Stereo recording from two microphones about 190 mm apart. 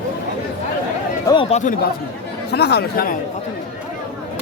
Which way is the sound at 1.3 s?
30° left (ahead or behind).